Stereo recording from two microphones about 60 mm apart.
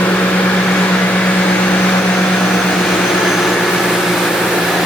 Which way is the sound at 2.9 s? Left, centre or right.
Centre.